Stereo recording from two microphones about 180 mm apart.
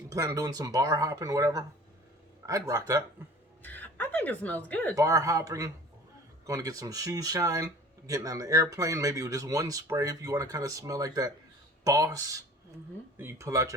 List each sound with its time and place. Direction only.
0.1 s speech: 20° right (ahead or behind)
3.6 s speech: 10° left (ahead or behind)
4.9 s speech: 20° right (ahead or behind)